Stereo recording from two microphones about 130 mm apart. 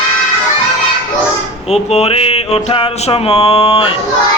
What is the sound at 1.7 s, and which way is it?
Music, 55° left (ahead or behind).